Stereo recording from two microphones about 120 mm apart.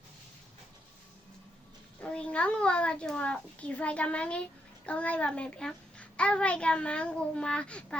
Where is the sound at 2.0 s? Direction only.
10° left (ahead or behind).